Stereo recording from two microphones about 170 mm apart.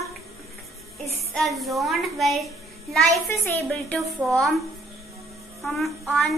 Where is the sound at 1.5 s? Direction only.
Centre (ahead or behind).